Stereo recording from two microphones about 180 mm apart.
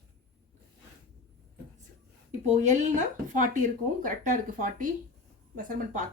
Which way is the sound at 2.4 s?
40° right (ahead or behind).